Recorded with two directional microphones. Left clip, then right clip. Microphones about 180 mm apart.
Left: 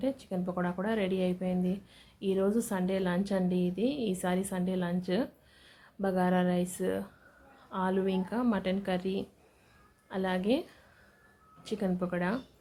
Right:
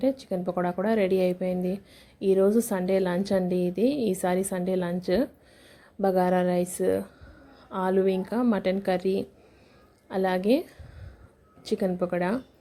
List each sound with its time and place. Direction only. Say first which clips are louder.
0.0 s speech: right 7 dB; 25° right (ahead or behind)